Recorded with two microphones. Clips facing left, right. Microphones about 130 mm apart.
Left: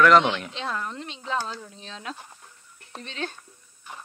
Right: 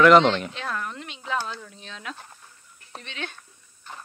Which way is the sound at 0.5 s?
20° left (ahead or behind).